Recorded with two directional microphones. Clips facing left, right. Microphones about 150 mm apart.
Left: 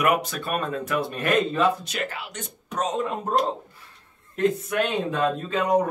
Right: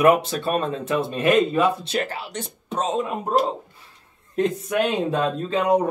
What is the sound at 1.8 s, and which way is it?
Speech, 35° right (ahead or behind).